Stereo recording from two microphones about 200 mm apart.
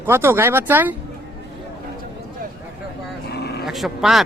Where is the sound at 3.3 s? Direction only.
55° left (ahead or behind).